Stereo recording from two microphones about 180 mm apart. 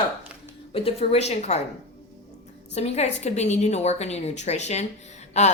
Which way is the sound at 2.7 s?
35° left (ahead or behind).